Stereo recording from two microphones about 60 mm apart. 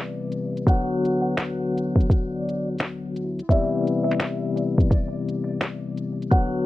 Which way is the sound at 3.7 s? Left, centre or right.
Centre.